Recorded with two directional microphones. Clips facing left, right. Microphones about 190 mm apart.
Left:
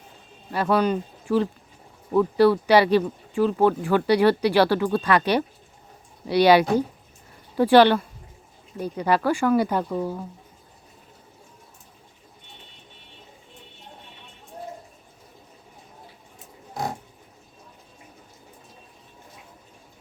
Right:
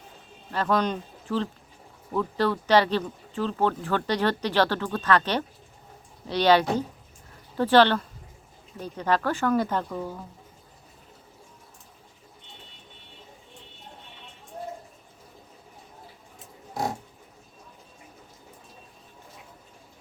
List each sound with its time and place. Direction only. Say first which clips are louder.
0.5 s speech: left 4 dB; 10° left (ahead or behind)